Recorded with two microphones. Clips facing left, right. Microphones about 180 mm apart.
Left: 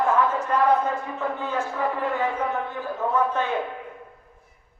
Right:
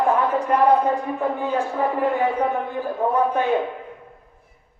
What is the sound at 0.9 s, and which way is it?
A man's voice, 15° right (ahead or behind).